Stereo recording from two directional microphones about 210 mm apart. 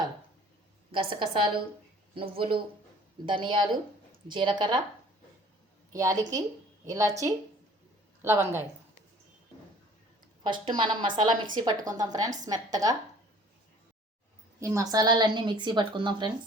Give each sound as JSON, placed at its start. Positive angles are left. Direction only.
{"t": 0.9, "sound": "a woman's voice", "side_deg": -25}
{"t": 5.9, "sound": "a woman's voice", "side_deg": -15}
{"t": 10.4, "sound": "a woman's voice", "side_deg": -20}
{"t": 14.6, "sound": "a woman's voice", "side_deg": -15}